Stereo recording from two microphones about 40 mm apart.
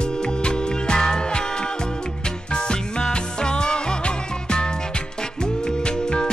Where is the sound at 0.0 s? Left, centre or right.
Left.